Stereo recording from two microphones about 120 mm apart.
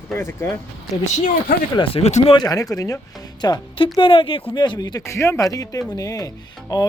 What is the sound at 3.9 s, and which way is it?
Speech, 45° left (ahead or behind).